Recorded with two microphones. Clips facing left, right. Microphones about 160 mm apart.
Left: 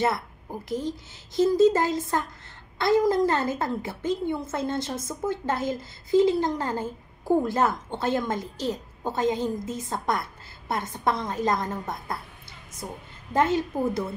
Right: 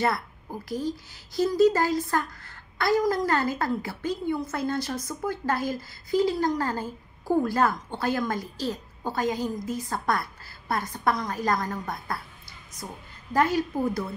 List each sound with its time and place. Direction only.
0.0 s a woman's voice: 20° left (ahead or behind)
12.8 s a woman's voice: 10° left (ahead or behind)
13.3 s a woman's voice: 25° left (ahead or behind)